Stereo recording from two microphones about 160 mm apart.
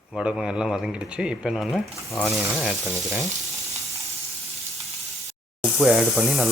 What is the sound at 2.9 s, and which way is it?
Frying, 15° left (ahead or behind).